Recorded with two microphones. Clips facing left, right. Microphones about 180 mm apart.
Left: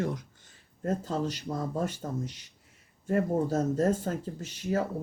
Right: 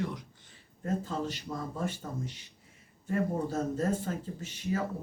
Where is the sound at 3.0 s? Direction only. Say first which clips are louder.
Left 4 dB; 45° left (ahead or behind).